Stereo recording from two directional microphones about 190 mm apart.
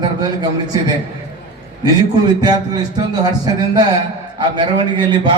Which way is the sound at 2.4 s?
20° right (ahead or behind).